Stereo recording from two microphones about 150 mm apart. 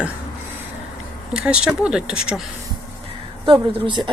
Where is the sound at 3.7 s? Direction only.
30° right (ahead or behind).